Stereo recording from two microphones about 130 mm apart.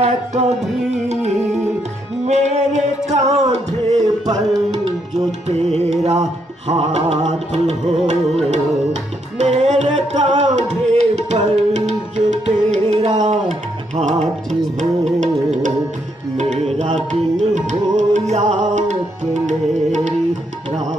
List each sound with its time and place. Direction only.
0.0 s music: 55° right (ahead or behind)
2.2 s music: 60° right (ahead or behind)
16.3 s music: 60° right (ahead or behind)